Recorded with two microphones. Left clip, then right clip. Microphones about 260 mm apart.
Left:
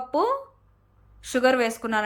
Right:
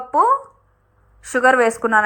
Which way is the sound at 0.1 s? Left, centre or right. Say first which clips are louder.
Right 9 dB; right.